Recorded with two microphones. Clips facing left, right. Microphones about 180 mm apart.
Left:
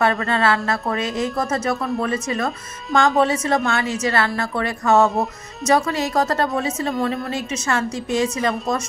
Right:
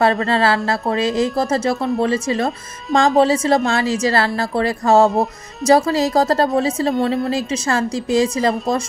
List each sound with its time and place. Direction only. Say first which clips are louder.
0.0 s speech: right 3 dB; 30° right (ahead or behind)